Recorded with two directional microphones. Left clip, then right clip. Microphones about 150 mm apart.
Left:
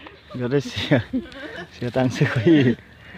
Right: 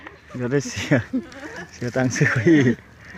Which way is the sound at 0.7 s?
5° left (ahead or behind).